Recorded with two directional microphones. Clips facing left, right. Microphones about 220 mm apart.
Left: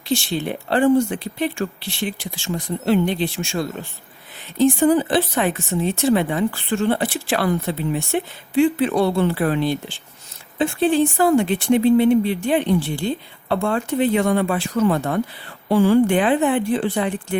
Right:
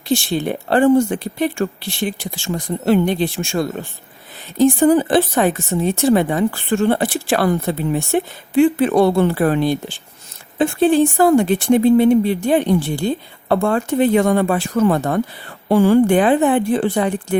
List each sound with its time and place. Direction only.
0.1 s speech: 50° right (ahead or behind)